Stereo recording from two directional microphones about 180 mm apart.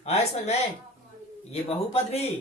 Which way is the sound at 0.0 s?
35° left (ahead or behind).